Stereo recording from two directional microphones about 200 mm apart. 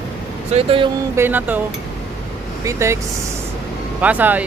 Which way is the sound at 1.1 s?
10° right (ahead or behind).